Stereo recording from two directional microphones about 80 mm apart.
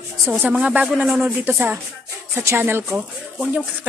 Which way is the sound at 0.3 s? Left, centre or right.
Centre.